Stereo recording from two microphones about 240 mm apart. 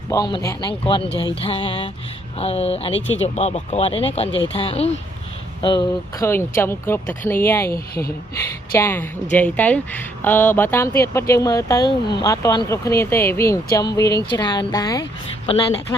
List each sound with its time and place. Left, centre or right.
0.1 s speech: centre
7.7 s speech: left
8.4 s speech: centre